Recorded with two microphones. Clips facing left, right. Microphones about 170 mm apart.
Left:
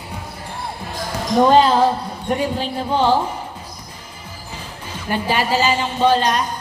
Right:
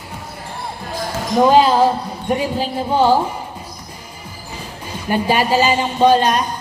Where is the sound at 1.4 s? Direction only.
5° right (ahead or behind).